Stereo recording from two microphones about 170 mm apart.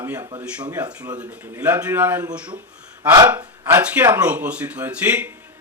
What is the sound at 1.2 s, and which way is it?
Speech, 10° right (ahead or behind).